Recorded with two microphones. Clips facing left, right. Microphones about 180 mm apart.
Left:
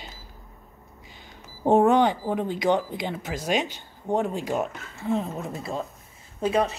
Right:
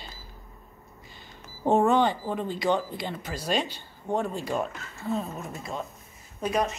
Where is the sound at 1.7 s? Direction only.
15° left (ahead or behind).